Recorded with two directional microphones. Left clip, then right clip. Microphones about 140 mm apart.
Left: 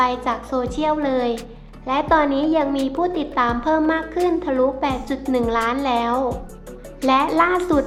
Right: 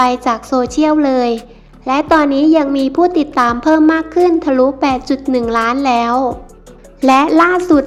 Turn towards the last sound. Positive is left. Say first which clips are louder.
# right 7 dB
turn(degrees=-40)  # may be behind; listen again after turning